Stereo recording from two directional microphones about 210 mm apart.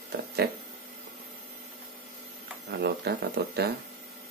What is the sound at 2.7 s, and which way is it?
Speech, 50° right (ahead or behind).